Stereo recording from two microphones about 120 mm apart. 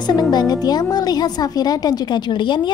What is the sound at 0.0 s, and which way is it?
Speech, 35° left (ahead or behind).